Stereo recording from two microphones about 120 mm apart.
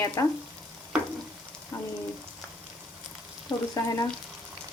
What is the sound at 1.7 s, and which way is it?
Frying, 35° left (ahead or behind).